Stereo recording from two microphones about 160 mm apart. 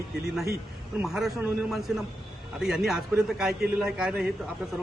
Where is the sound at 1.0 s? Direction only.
Centre (ahead or behind).